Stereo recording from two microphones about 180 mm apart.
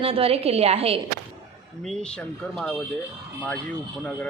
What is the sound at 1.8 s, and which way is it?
Speech, 5° left (ahead or behind).